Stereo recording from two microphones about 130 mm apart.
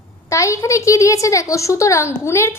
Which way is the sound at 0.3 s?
25° left (ahead or behind).